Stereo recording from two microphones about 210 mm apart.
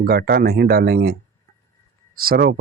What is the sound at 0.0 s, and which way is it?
Speech, 45° right (ahead or behind).